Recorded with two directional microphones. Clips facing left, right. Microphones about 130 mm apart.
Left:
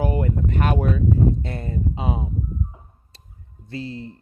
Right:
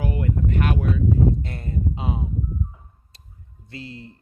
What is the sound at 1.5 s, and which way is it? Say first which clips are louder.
Speech: left 3 dB; 30° left (ahead or behind).